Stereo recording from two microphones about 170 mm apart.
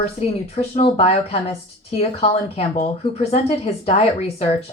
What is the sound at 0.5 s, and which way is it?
Speech, 40° left (ahead or behind).